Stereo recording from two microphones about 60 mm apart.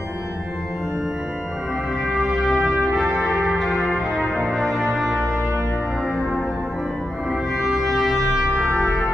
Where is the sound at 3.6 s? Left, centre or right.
Centre.